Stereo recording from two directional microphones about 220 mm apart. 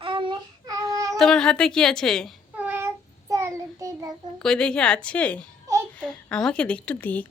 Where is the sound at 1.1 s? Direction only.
Centre (ahead or behind); by 4.1 s 15° right (ahead or behind).